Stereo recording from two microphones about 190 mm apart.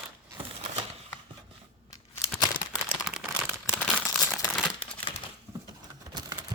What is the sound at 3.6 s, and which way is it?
Crumpling, 5° left (ahead or behind).